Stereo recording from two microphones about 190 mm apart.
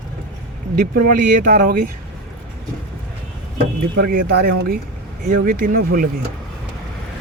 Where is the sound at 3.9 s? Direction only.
55° right (ahead or behind).